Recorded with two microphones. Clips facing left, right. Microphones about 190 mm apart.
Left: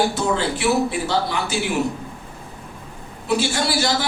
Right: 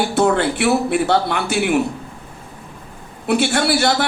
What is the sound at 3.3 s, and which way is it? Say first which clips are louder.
Speech: right 4 dB; 60° right (ahead or behind).